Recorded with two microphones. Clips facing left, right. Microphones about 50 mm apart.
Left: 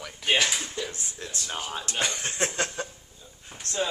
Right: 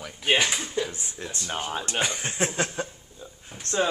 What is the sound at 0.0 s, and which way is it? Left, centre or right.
Speech, centre.